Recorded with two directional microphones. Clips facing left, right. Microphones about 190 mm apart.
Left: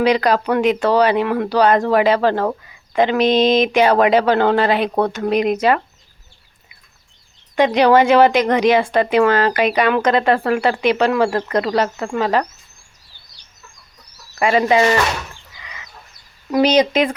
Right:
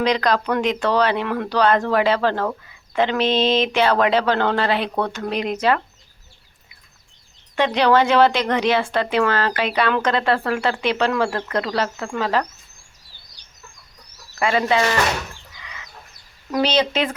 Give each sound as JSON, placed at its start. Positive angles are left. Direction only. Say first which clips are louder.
{"t": 0.0, "sound": "speech", "louder": "left 4 dB", "side_deg": 10}
{"t": 7.5, "sound": "speech", "louder": "left 4 dB", "side_deg": 10}
{"t": 14.4, "sound": "speech", "louder": "left 4 dB", "side_deg": 20}
{"t": 16.5, "sound": "speech", "louder": "left 5 dB", "side_deg": 15}